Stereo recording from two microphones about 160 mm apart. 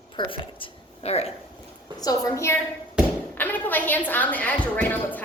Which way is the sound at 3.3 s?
10° left (ahead or behind).